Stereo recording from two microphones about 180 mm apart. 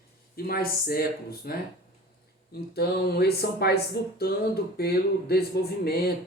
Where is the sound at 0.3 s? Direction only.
55° left (ahead or behind).